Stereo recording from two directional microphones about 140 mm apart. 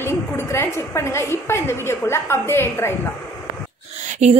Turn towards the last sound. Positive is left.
turn(degrees=-50)  # may be behind; listen again after turning